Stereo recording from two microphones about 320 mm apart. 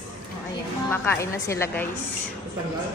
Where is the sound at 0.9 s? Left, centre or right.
Centre.